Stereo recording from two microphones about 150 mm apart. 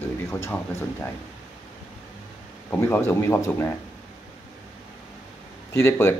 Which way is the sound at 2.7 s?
15° left (ahead or behind).